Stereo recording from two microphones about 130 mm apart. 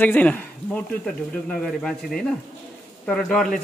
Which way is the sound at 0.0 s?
15° left (ahead or behind).